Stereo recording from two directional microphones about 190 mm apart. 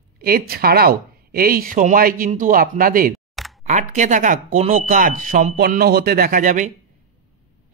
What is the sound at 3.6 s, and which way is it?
Speech, 40° right (ahead or behind).